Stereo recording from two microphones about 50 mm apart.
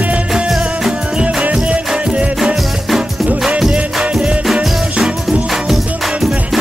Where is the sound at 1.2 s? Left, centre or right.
Right.